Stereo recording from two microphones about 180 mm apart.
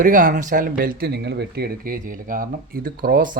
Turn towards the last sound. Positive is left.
turn(degrees=-55)  # may be behind; listen again after turning